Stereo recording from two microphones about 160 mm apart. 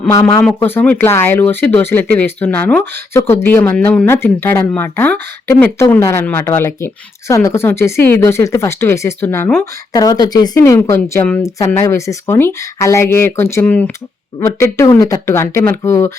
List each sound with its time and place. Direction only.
0.1 s speech: 25° left (ahead or behind)
0.4 s speech: 10° left (ahead or behind)